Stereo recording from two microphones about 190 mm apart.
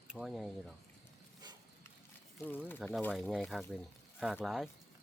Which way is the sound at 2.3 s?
10° left (ahead or behind).